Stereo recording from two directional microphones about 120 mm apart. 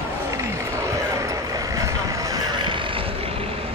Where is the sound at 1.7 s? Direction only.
25° right (ahead or behind).